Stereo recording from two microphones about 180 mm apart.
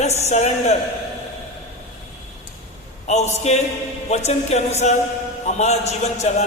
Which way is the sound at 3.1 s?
40° left (ahead or behind).